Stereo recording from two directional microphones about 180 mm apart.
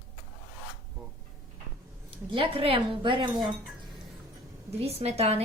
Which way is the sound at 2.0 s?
30° right (ahead or behind).